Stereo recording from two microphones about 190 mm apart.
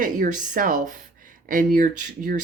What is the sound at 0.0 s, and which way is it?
Speech, 45° right (ahead or behind).